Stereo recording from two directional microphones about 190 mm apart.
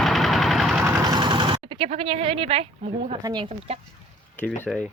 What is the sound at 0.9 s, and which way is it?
Speech, 20° right (ahead or behind).